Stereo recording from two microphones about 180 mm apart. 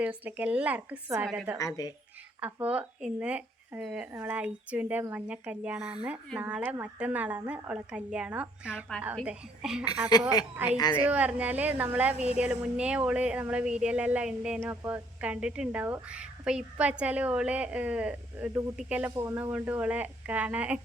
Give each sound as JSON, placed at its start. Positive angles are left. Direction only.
{"t": 0.0, "sound": "speech", "side_deg": -10}
{"t": 1.5, "sound": "speech", "side_deg": 20}
{"t": 2.4, "sound": "a woman's voice", "side_deg": -10}
{"t": 10.1, "sound": "speech", "side_deg": 20}
{"t": 11.0, "sound": "speech", "side_deg": -10}